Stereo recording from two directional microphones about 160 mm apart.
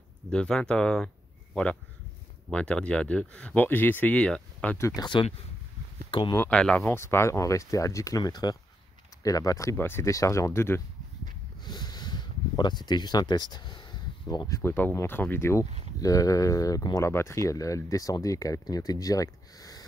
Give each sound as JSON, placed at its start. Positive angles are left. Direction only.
{"t": 0.3, "sound": "speech", "side_deg": 5}
{"t": 6.0, "sound": "a sound", "side_deg": 30}
{"t": 6.3, "sound": "speech", "side_deg": 10}
{"t": 11.6, "sound": "speech", "side_deg": 25}